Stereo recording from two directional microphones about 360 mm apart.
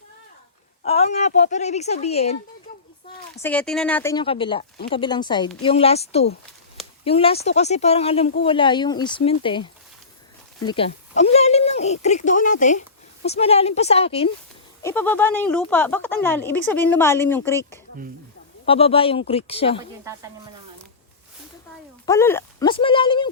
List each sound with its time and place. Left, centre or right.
0.8 s a woman's voice: centre
3.4 s a woman's voice: centre
10.7 s a woman's voice: centre
22.0 s a woman's voice: centre